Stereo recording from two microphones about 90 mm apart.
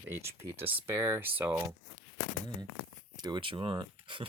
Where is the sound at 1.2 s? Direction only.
20° right (ahead or behind).